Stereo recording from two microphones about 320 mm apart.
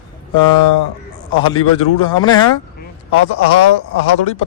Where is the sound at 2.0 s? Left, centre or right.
Centre.